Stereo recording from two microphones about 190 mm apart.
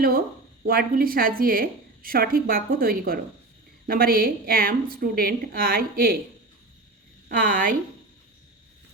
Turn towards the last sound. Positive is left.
turn(degrees=-45)  # may be behind; listen again after turning